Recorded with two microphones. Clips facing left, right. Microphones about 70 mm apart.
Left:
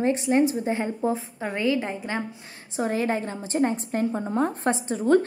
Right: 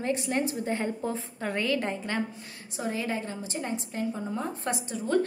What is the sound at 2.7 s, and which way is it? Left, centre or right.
A woman's voice, left.